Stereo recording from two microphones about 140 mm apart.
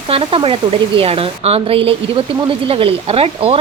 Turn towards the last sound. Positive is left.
turn(degrees=-45)  # may be behind; listen again after turning